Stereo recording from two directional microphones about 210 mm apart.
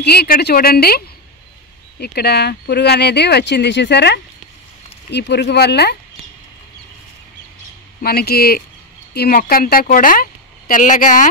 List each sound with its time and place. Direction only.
0.0 s speech: 50° left (ahead or behind)
8.0 s a woman's voice: 45° left (ahead or behind)